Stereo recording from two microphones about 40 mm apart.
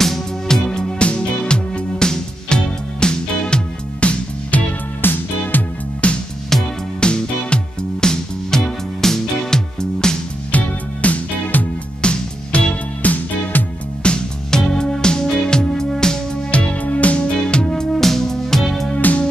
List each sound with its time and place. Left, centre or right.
0.0 s music: centre; by 4.6 s left
5.0 s music: left
6.0 s music: left
6.5 s music: centre
7.0 s music: left
10.5 s music: left
12.0 s music: left
13.0 s music: left
14.0 s music: left
16.5 s music: left; by 18.9 s centre
18.9 s music: left